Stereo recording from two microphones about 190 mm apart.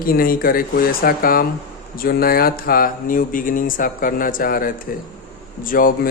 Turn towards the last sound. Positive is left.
turn(degrees=50)  # may be behind; listen again after turning